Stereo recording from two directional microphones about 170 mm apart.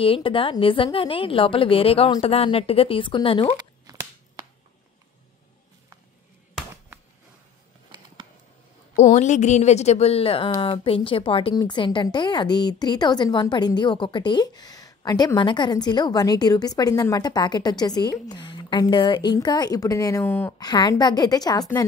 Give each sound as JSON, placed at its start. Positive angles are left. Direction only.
{"t": 0.0, "sound": "a woman's voice", "side_deg": 30}
{"t": 8.9, "sound": "a woman's voice", "side_deg": 40}
{"t": 20.6, "sound": "a woman's voice", "side_deg": 25}